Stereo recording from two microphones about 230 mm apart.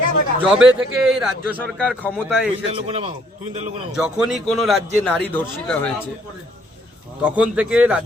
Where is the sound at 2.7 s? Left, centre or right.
Right.